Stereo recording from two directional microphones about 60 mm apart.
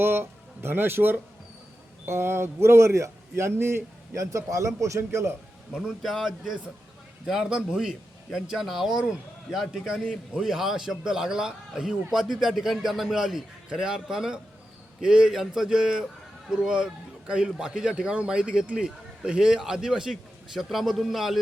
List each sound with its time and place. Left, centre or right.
0.0 s a man's voice: right
4.1 s a man's voice: right
6.0 s a man's voice: centre